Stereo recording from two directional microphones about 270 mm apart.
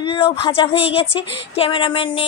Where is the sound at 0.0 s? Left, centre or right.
Centre.